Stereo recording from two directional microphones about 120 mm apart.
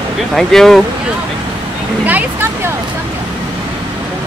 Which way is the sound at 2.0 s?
15° right (ahead or behind).